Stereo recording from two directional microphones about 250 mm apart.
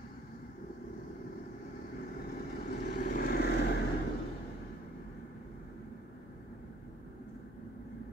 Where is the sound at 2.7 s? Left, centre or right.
Left.